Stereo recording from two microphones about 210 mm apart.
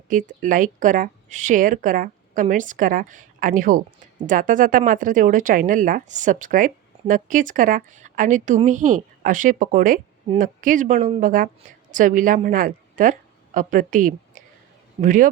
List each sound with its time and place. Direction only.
0.1 s a woman's voice: 40° right (ahead or behind)